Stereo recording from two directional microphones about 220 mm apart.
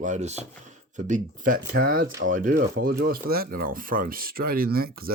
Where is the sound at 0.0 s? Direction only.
30° right (ahead or behind).